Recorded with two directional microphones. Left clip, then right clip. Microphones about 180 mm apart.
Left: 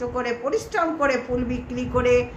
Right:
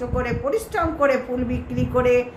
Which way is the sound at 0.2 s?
Centre (ahead or behind).